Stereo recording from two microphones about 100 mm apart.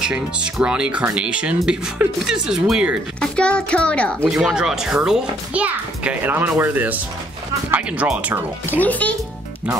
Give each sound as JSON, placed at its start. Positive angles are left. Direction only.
{"t": 0.0, "sound": "a child's voice", "side_deg": -10}
{"t": 3.2, "sound": "a child's voice", "side_deg": 10}
{"t": 4.3, "sound": "a child's voice", "side_deg": -5}
{"t": 8.6, "sound": "a child's voice", "side_deg": 15}